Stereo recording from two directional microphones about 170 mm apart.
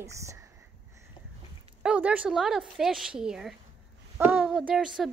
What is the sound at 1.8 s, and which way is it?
A woman's voice, 5° right (ahead or behind).